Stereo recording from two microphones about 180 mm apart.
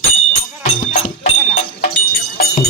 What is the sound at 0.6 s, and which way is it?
Music, 45° left (ahead or behind).